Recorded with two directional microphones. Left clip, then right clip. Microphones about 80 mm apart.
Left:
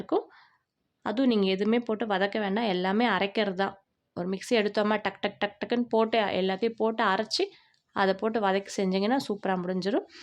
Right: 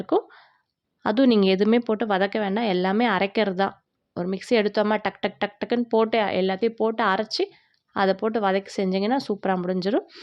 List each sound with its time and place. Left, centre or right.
0.0 s a sound: right
1.0 s speech: right
1.7 s a woman's voice: right